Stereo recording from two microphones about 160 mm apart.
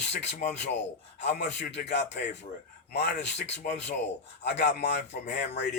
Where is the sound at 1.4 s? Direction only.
90° left.